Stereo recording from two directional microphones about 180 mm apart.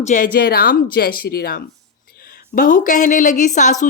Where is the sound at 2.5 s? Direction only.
45° left (ahead or behind).